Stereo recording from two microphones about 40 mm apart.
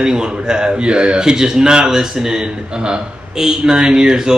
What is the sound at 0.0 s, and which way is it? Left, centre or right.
A man's voice, right.